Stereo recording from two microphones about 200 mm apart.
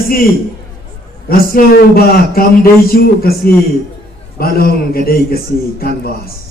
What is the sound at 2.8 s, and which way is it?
A man's voice, 50° left (ahead or behind).